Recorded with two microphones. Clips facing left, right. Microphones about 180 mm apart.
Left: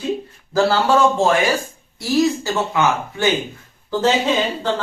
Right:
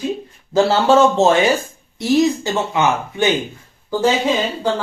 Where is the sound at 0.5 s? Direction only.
25° right (ahead or behind).